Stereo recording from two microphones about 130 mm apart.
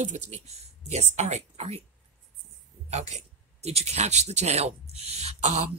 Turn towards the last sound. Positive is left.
turn(degrees=-60)  # may be behind; listen again after turning